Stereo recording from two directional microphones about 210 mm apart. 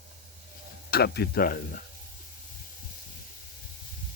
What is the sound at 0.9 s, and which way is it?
Speech, 45° left (ahead or behind).